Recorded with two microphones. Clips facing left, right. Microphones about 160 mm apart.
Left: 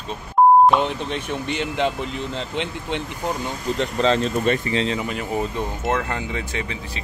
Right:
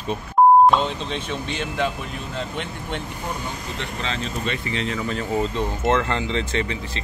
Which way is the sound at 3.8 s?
40° left (ahead or behind).